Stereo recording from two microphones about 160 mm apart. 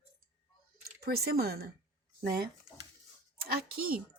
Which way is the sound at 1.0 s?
75° right (ahead or behind).